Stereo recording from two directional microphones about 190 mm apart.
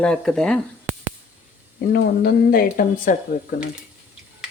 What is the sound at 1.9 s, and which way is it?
Speech, 55° left (ahead or behind).